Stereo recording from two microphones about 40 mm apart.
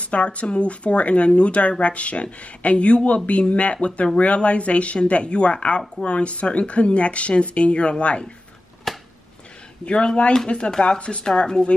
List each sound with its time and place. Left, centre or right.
0.0 s speech: left
8.9 s a sound: centre
9.8 s speech: left